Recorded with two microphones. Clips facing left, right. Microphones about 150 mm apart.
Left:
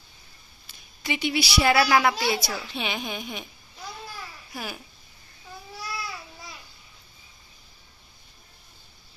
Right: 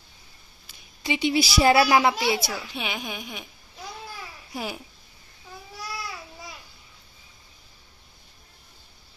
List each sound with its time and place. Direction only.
1.0 s a woman's voice: 20° right (ahead or behind)
1.3 s a woman's voice: 35° right (ahead or behind)
1.7 s a woman's voice: 20° right (ahead or behind); by 3.4 s 5° right (ahead or behind)
4.5 s a woman's voice: 20° right (ahead or behind)